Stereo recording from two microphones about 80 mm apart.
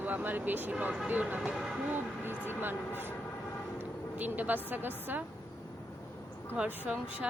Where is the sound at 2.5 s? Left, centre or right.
Right.